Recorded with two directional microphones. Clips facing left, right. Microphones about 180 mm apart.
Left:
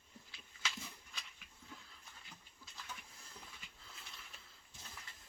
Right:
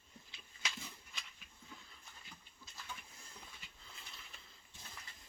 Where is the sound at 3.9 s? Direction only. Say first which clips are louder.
Even; centre (ahead or behind).